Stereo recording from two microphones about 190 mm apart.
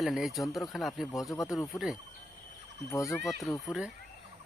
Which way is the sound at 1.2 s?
15° left (ahead or behind).